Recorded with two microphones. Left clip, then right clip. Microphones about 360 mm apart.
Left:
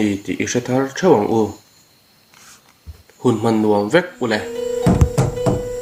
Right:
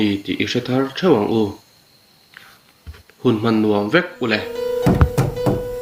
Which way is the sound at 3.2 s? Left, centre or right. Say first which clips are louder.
Left 1 dB; left.